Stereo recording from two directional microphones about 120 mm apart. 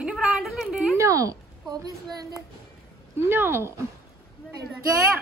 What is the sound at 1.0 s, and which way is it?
A child's voice, 25° right (ahead or behind).